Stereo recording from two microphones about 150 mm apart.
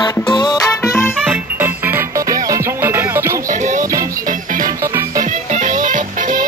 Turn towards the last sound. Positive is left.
turn(degrees=-60)  # may be behind; listen again after turning